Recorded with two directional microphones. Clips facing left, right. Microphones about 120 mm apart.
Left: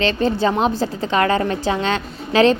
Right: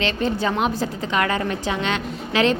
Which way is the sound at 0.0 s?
35° left (ahead or behind).